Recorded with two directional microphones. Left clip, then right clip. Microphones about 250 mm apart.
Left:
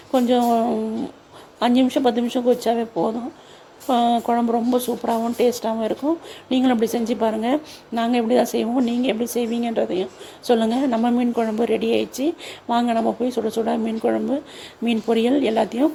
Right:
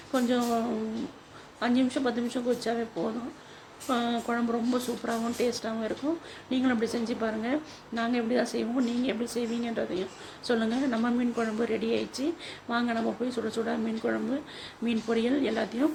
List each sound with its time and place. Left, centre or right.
0.1 s a woman's voice: left